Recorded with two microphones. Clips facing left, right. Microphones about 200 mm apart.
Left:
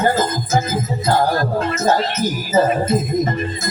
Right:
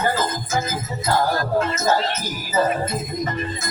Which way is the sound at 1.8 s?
35° left (ahead or behind).